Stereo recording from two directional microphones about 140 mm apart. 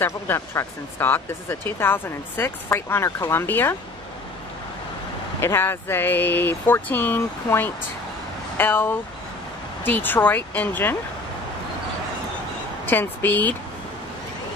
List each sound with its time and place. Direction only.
0.0 s speech: 15° left (ahead or behind)
5.4 s speech: 15° left (ahead or behind)
12.8 s speech: 15° left (ahead or behind)